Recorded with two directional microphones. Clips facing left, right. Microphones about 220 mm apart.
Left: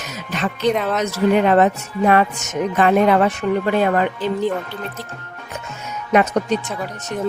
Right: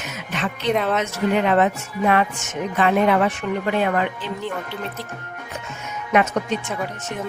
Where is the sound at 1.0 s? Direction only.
40° left (ahead or behind).